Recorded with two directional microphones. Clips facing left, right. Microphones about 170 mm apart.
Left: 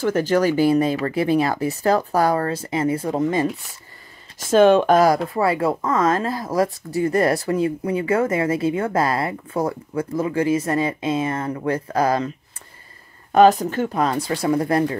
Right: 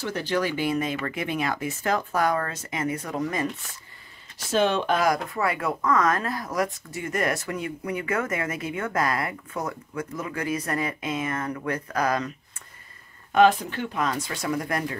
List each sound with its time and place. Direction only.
0.0 s speech: 45° left (ahead or behind); by 3.4 s 30° left (ahead or behind)
4.4 s speech: 45° left (ahead or behind); by 12.3 s 30° left (ahead or behind)
13.3 s speech: 40° left (ahead or behind)